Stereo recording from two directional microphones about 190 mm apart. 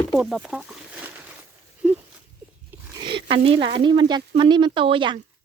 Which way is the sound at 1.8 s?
5° right (ahead or behind).